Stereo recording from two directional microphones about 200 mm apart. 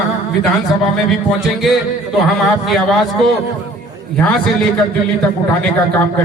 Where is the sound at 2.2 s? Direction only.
Centre (ahead or behind).